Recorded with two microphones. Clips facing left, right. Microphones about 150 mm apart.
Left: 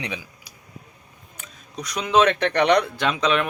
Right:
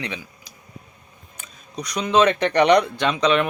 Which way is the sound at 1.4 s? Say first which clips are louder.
Right 2 dB; centre (ahead or behind).